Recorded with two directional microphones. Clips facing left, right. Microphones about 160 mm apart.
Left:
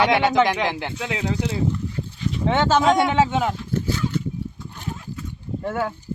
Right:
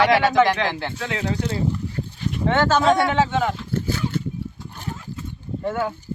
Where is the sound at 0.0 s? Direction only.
20° left (ahead or behind).